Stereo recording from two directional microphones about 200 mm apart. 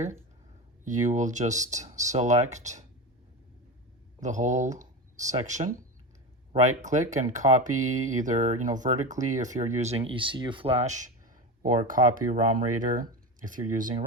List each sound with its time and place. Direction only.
0.9 s speech: 40° right (ahead or behind)
4.2 s speech: 35° right (ahead or behind)